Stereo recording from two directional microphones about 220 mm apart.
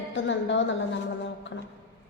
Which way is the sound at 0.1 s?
55° left (ahead or behind).